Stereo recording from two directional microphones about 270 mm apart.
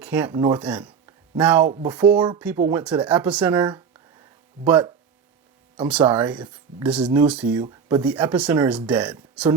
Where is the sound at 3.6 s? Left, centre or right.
Centre.